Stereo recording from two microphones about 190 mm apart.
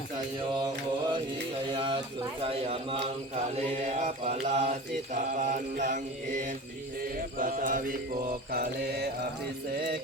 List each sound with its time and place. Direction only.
0.6 s mantra: 20° right (ahead or behind)
1.7 s a sound: 25° right (ahead or behind)
2.4 s speech: 30° right (ahead or behind)
3.5 s mantra: 35° right (ahead or behind)
8.5 s mantra: 60° right (ahead or behind)